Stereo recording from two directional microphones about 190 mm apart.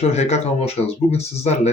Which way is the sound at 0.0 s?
35° left (ahead or behind).